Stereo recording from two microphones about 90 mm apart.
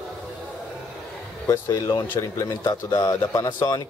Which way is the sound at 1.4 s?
40° left (ahead or behind).